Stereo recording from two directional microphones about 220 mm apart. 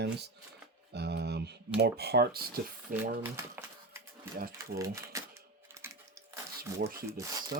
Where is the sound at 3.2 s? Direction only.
10° right (ahead or behind).